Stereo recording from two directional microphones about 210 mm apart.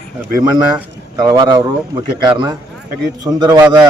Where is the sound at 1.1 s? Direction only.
20° right (ahead or behind).